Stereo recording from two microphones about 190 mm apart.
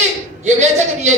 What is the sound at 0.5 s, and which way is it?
Speech, 35° right (ahead or behind).